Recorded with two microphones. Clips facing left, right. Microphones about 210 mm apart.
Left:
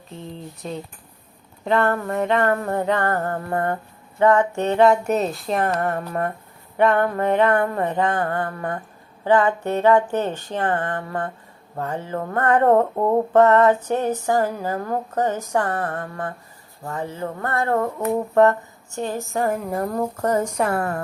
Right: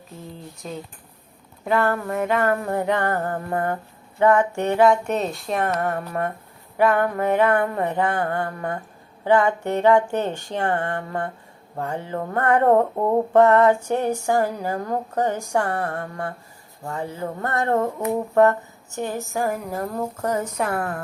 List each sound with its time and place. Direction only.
0.6 s speech: centre (ahead or behind)
4.8 s speech: 5° left (ahead or behind); by 17.8 s 20° right (ahead or behind)
19.3 s speech: centre (ahead or behind)
20.7 s a woman's voice: 10° left (ahead or behind)